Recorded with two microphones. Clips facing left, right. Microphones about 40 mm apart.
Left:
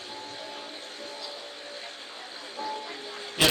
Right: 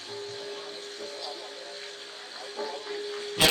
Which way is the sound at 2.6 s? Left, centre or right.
Left.